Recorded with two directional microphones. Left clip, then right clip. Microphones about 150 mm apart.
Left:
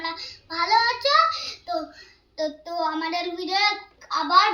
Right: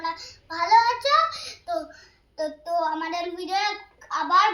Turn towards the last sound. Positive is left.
turn(degrees=-5)  # may be behind; listen again after turning